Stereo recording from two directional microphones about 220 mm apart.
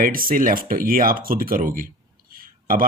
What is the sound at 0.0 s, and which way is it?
Speech, 40° right (ahead or behind).